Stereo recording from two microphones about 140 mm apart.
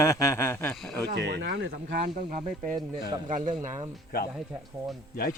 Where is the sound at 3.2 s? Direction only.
65° right (ahead or behind).